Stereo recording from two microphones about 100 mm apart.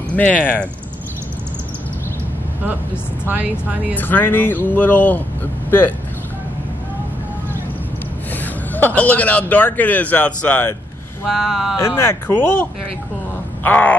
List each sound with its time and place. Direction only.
0.1 s speech: 15° left (ahead or behind)
3.3 s speech: 15° right (ahead or behind)
3.9 s a man's voice: 20° left (ahead or behind)
8.7 s a man's voice: 15° left (ahead or behind)
11.2 s speech: centre (ahead or behind)
11.8 s speech: 25° left (ahead or behind)
13.7 s a man's voice: 15° left (ahead or behind)